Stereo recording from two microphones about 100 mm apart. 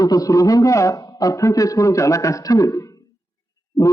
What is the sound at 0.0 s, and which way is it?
A man's voice, 35° left (ahead or behind).